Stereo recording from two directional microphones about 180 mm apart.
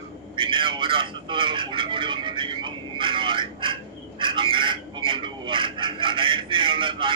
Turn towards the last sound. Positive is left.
turn(degrees=-25)  # may be behind; listen again after turning